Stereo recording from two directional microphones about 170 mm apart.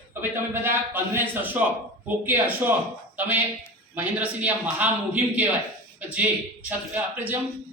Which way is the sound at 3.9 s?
10° right (ahead or behind).